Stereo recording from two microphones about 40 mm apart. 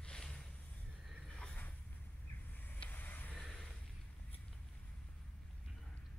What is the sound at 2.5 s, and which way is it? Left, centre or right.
Vehicle, left.